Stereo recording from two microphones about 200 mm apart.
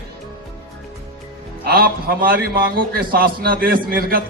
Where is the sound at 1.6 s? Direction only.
50° right (ahead or behind).